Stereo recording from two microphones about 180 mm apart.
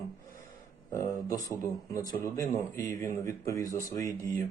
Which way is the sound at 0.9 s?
15° left (ahead or behind).